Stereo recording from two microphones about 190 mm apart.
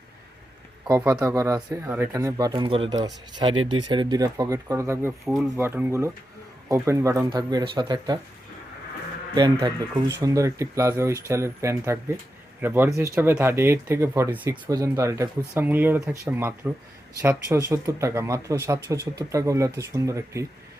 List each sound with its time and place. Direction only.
0.9 s speech: 20° right (ahead or behind)
5.2 s speech: centre (ahead or behind)
5.5 s speech: 10° right (ahead or behind)
9.3 s speech: 20° right (ahead or behind)